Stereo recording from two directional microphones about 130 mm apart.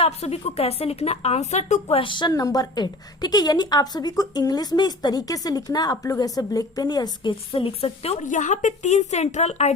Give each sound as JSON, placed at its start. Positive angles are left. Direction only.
{"t": 0.0, "sound": "a woman's voice", "side_deg": 55}
{"t": 2.0, "sound": "a woman's voice", "side_deg": 40}
{"t": 8.2, "sound": "a woman's voice", "side_deg": 75}